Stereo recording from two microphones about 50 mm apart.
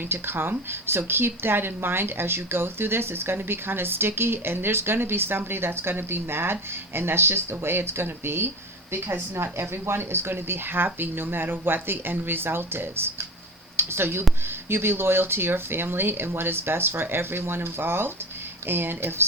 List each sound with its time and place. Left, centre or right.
0.1 s speech: right